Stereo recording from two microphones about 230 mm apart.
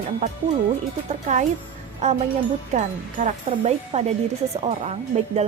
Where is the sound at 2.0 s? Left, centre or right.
Right.